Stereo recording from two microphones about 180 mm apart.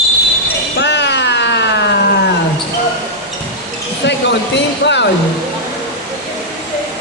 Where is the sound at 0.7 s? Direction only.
75° left (ahead or behind).